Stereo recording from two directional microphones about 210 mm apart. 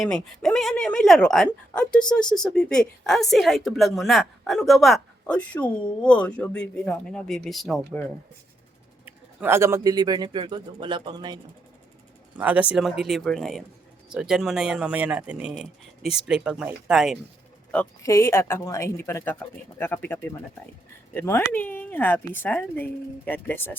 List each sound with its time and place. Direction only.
0.0 s a woman's voice: centre (ahead or behind)
9.0 s speech: 10° right (ahead or behind)
12.4 s a woman's voice: 5° right (ahead or behind)
17.7 s speech: 10° left (ahead or behind)